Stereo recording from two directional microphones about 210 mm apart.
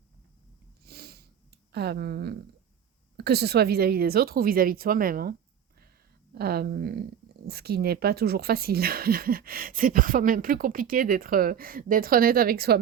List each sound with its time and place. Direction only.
0.9 s sniff: 50° right (ahead or behind)
3.2 s speech: 50° right (ahead or behind)
6.3 s speech: 50° right (ahead or behind)